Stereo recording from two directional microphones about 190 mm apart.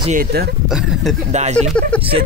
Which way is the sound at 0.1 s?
55° right (ahead or behind).